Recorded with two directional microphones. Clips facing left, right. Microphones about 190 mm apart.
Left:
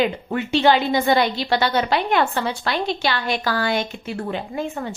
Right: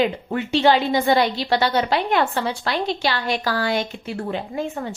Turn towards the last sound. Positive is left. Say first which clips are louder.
# even
turn(degrees=-35)  # may be behind; listen again after turning